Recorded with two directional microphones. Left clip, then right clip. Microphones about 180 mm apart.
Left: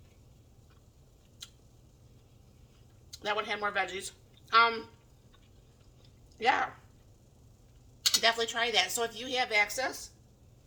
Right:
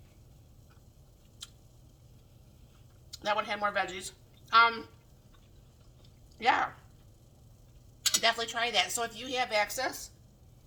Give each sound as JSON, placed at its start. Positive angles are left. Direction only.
{"t": 3.1, "sound": "a woman's voice", "side_deg": 15}
{"t": 6.4, "sound": "speech", "side_deg": 20}
{"t": 8.2, "sound": "a woman's voice", "side_deg": 20}